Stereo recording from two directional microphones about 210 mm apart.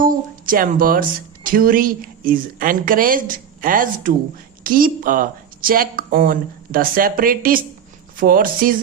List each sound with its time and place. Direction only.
0.0 s speech: 40° right (ahead or behind)